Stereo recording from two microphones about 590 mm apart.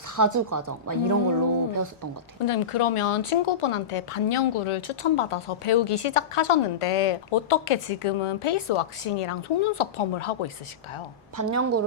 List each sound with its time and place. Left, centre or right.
0.2 s speech: right
2.5 s speech: left
11.3 s a woman's voice: right